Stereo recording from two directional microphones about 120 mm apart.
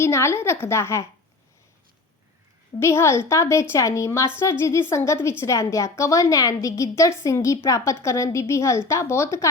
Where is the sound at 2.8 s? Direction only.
20° left (ahead or behind).